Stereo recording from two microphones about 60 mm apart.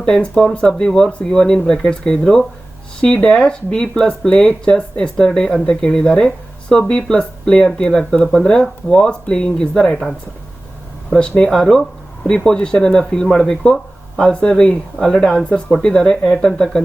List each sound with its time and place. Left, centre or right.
0.0 s speech: centre
3.0 s speech: centre
11.2 s speech: centre